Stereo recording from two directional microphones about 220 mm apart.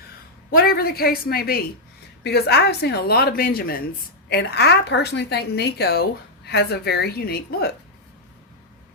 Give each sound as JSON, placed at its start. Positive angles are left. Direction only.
{"t": 0.5, "sound": "a woman's voice", "side_deg": 45}